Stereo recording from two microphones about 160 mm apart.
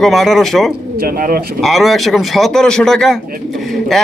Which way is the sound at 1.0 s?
65° right (ahead or behind).